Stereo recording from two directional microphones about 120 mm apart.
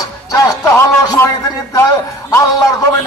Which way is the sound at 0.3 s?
25° left (ahead or behind).